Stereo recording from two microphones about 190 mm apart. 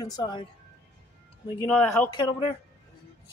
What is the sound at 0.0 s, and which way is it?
Speech, 20° left (ahead or behind).